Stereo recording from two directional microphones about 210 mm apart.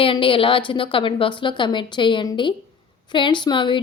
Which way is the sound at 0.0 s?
25° left (ahead or behind).